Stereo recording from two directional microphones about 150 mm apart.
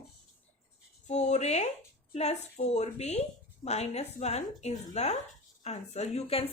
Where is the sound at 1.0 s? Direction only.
50° left (ahead or behind).